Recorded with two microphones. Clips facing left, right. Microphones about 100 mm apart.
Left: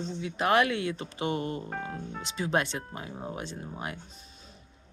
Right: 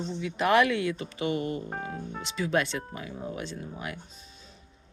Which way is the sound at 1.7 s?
20° right (ahead or behind).